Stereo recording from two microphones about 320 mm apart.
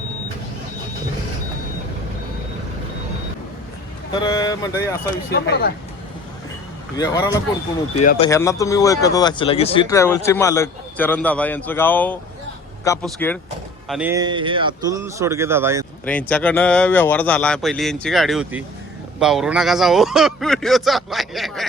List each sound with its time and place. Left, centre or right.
4.1 s speech: centre
5.3 s speech: left
6.9 s speech: centre
7.9 s speech: left
8.3 s speech: centre
16.0 s speech: centre